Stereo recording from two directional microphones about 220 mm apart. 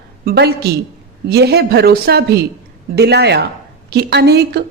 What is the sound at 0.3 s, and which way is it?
A woman's voice, 45° right (ahead or behind).